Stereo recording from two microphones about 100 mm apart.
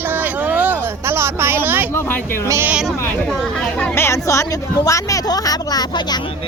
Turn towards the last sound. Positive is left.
turn(degrees=45)  # may be behind; listen again after turning